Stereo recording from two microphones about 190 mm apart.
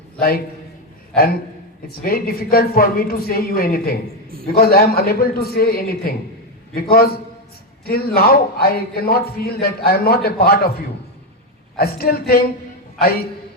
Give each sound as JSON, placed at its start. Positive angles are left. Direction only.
{"t": 0.2, "sound": "a man's voice", "side_deg": 55}
{"t": 1.9, "sound": "a man's voice", "side_deg": 50}
{"t": 11.8, "sound": "a man's voice", "side_deg": 55}